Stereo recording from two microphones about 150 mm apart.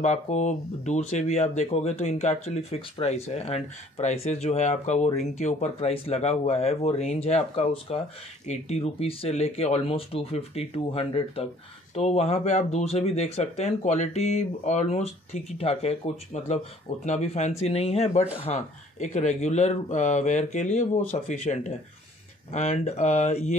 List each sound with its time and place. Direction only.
0.0 s speech: 55° left (ahead or behind)